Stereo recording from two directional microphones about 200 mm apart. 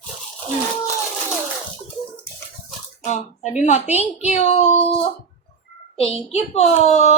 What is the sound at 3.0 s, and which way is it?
Speech, 35° left (ahead or behind).